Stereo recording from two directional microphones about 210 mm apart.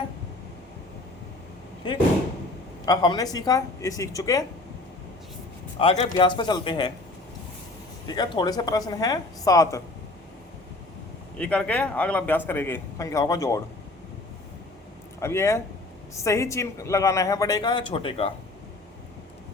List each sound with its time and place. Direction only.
1.8 s a man's voice: 25° left (ahead or behind)
5.8 s a man's voice: 25° left (ahead or behind)
8.0 s a man's voice: 20° left (ahead or behind)
11.3 s a man's voice: 5° left (ahead or behind)
15.2 s a man's voice: 15° left (ahead or behind)